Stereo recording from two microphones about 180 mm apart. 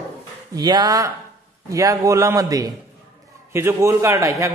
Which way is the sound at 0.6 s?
20° right (ahead or behind).